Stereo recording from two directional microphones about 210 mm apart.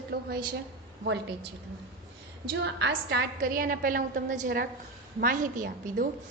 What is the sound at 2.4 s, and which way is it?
Speech, 55° right (ahead or behind).